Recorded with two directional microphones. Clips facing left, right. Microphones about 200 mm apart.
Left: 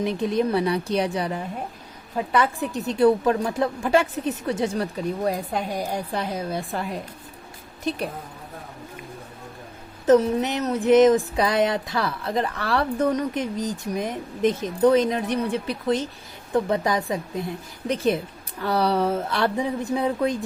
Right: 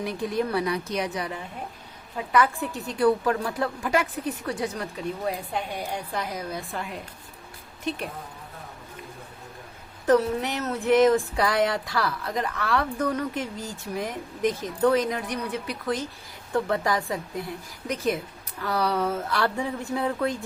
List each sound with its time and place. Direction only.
0.0 s a woman's voice: 20° left (ahead or behind)
10.1 s a woman's voice: 20° left (ahead or behind)
13.1 s a woman's voice: 20° left (ahead or behind)